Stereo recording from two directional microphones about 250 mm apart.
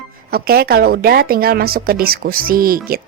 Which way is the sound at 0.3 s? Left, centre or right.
Right.